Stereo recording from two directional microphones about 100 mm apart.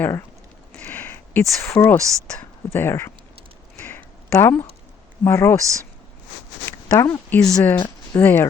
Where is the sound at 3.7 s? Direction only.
20° left (ahead or behind).